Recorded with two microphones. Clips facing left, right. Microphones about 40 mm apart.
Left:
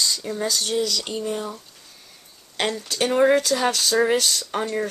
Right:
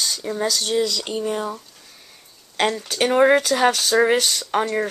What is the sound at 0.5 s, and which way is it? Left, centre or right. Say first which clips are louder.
Speech: right 1 dB; centre.